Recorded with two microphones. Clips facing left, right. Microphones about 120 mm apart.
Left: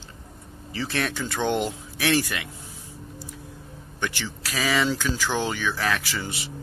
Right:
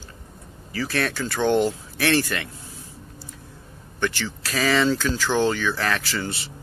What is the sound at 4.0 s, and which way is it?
Speech, 15° left (ahead or behind).